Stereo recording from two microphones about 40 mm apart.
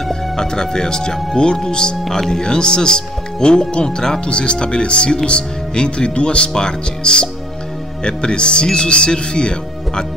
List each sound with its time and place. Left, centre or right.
0.1 s speech: centre